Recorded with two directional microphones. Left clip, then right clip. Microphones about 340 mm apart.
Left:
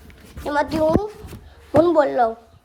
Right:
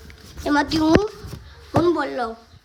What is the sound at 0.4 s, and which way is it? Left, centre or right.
A woman's voice, centre.